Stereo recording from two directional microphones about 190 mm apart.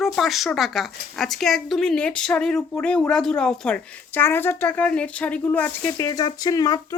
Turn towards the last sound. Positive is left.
turn(degrees=20)  # may be behind; listen again after turning